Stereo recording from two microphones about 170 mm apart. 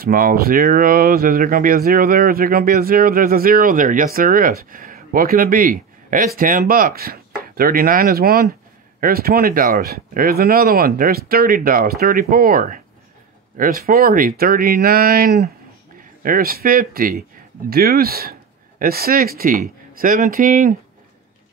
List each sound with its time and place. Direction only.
0.0 s speech: 60° right (ahead or behind)